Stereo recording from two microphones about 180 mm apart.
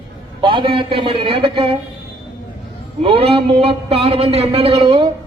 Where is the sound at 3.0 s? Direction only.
30° right (ahead or behind).